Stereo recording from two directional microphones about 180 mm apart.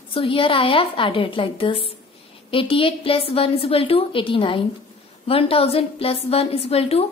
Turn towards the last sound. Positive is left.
turn(degrees=35)  # may be behind; listen again after turning